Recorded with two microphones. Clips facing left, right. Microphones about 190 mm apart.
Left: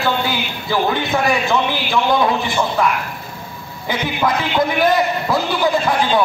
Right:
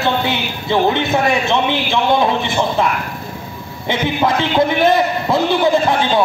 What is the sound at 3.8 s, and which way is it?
A man's voice, 25° right (ahead or behind).